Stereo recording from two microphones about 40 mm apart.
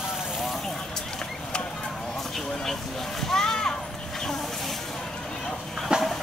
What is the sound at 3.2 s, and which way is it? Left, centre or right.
Speech, centre.